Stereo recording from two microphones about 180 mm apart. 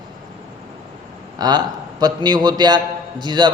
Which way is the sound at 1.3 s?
20° right (ahead or behind).